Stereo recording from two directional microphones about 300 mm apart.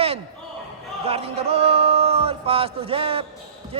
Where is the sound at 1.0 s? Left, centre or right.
Centre.